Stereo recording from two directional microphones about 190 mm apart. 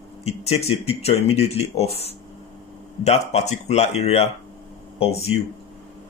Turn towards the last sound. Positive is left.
turn(degrees=35)  # may be behind; listen again after turning